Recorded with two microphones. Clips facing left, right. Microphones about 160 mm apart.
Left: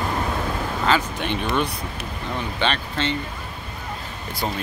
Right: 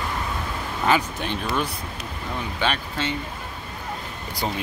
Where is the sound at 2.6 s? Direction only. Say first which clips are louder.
Left 2 dB; 10° right (ahead or behind).